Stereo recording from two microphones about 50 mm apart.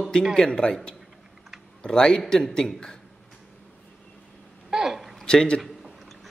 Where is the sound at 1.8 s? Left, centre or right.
Centre.